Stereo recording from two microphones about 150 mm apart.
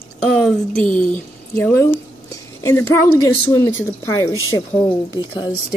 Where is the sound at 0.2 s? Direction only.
5° left (ahead or behind); by 5.5 s 30° left (ahead or behind).